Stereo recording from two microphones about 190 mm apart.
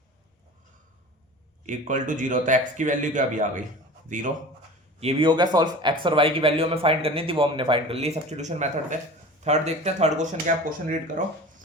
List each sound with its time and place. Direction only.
1.6 s speech: 45° right (ahead or behind)
4.9 s speech: 30° right (ahead or behind); by 10.9 s 45° right (ahead or behind)